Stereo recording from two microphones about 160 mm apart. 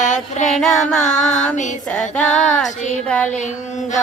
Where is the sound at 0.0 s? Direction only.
50° left (ahead or behind).